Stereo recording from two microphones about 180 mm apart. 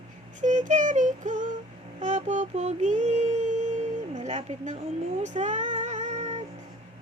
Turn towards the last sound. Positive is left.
turn(degrees=-40)  # may be behind; listen again after turning